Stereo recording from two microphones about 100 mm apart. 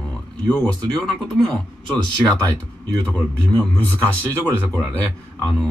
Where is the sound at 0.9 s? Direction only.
5° left (ahead or behind).